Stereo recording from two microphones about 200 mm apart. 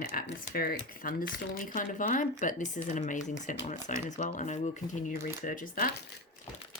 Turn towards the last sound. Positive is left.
turn(degrees=45)  # may be behind; listen again after turning